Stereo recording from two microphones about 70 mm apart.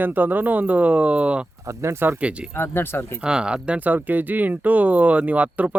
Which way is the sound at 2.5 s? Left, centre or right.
Left.